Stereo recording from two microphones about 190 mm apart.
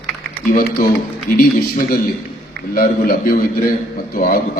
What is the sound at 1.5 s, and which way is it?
A man's voice, 50° left (ahead or behind).